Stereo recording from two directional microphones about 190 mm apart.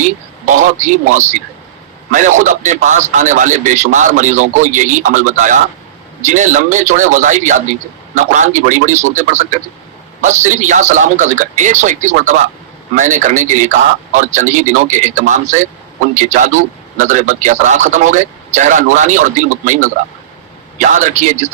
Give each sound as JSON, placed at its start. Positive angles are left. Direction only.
{"t": 0.0, "sound": "a man's voice", "side_deg": -40}